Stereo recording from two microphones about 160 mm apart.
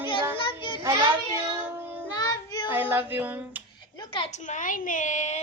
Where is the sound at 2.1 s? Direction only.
25° left (ahead or behind).